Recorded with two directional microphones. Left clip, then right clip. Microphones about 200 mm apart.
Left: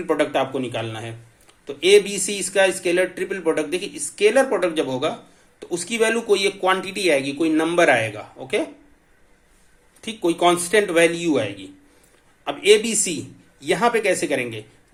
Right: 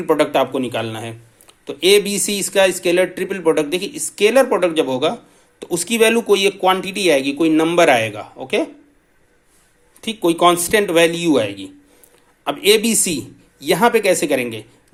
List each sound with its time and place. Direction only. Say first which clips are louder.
0.0 s a man's voice: right 5 dB; 35° right (ahead or behind)
10.0 s a man's voice: right 5 dB; 30° right (ahead or behind)